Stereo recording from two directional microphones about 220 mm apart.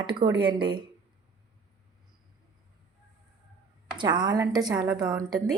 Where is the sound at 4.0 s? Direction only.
20° right (ahead or behind).